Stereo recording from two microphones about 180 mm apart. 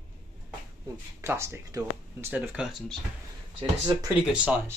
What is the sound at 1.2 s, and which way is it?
Speech, 15° right (ahead or behind).